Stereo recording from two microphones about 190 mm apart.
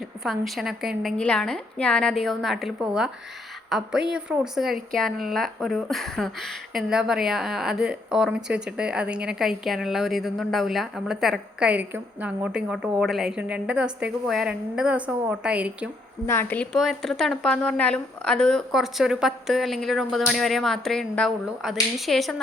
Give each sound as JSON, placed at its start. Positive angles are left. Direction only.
{"t": 0.3, "sound": "a woman's voice", "side_deg": 0}
{"t": 16.2, "sound": "a woman's voice", "side_deg": 10}